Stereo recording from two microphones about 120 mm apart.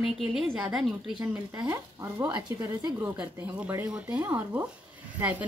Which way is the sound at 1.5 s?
35° right (ahead or behind).